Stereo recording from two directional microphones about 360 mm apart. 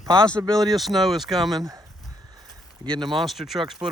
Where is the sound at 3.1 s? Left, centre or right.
Centre.